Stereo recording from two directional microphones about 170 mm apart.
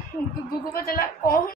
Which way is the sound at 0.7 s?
60° left (ahead or behind).